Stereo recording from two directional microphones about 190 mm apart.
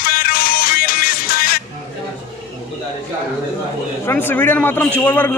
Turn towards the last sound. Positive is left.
turn(degrees=10)  # may be behind; listen again after turning